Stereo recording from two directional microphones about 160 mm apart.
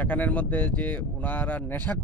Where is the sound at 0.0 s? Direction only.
10° left (ahead or behind).